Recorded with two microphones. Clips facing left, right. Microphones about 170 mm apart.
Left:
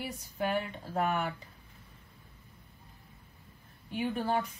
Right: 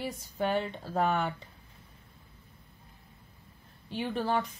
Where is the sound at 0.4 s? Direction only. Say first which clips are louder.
Right 2 dB; 30° right (ahead or behind).